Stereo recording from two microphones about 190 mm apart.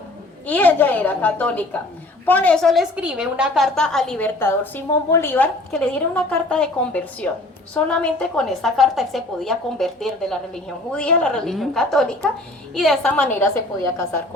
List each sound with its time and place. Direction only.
0.4 s a woman's voice: 10° left (ahead or behind)